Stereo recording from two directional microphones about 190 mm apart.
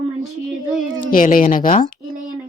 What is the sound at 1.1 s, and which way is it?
Speech, 45° left (ahead or behind).